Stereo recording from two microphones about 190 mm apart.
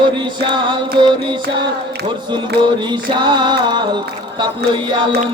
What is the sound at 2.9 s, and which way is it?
Music, 25° right (ahead or behind).